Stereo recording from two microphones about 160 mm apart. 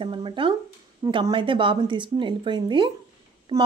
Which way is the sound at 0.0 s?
30° right (ahead or behind).